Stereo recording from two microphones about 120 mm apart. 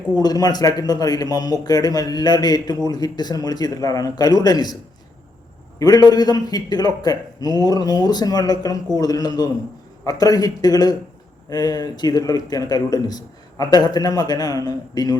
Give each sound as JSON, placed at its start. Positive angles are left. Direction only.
{"t": 0.2, "sound": "a man's voice", "side_deg": 35}
{"t": 5.8, "sound": "a man's voice", "side_deg": 35}